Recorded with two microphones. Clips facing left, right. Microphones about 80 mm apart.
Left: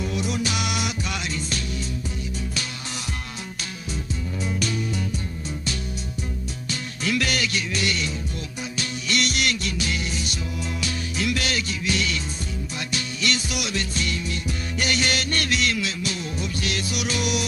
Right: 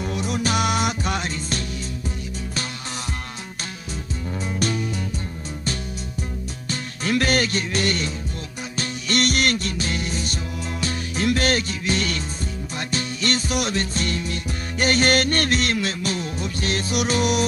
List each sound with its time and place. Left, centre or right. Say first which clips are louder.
0.0 s music: right 1 dB; right
4.6 s music: right 4 dB; right
6.7 s music: right 3 dB; right